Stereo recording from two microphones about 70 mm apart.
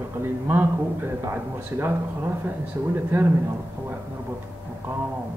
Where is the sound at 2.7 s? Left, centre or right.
Right.